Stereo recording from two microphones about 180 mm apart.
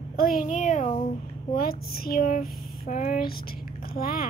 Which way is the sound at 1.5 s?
55° left (ahead or behind).